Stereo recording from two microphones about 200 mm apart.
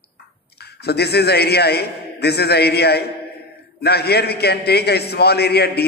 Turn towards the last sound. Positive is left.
turn(degrees=55)  # may be behind; listen again after turning